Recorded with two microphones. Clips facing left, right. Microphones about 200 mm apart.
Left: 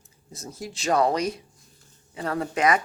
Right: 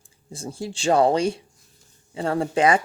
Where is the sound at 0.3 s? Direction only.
30° right (ahead or behind).